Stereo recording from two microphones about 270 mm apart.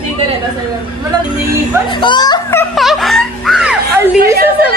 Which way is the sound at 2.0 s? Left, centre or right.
Centre.